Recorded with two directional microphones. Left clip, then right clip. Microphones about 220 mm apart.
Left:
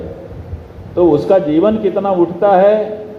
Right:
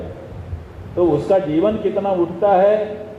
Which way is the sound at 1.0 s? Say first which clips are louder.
Left 5 dB; 40° left (ahead or behind).